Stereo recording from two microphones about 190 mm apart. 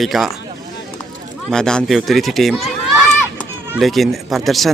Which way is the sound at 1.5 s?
5° left (ahead or behind).